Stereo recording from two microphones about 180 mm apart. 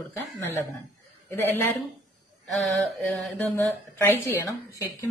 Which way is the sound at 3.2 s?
10° left (ahead or behind).